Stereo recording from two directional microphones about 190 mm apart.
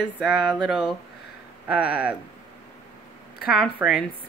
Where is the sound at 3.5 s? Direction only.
Centre (ahead or behind).